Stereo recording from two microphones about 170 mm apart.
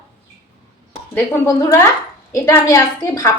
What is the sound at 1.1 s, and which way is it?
A woman's voice, 15° left (ahead or behind).